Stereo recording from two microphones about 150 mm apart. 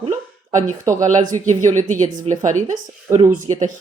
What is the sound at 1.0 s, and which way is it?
Speech, 55° right (ahead or behind).